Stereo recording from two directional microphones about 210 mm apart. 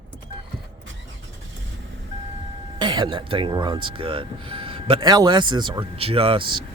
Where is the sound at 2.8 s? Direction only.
20° right (ahead or behind).